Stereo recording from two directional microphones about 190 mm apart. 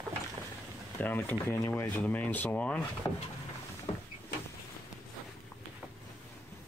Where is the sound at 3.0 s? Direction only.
25° left (ahead or behind).